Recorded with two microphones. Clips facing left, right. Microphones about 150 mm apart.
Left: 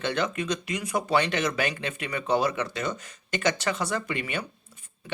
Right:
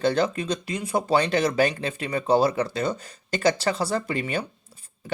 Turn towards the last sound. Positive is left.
turn(degrees=-35)  # may be behind; listen again after turning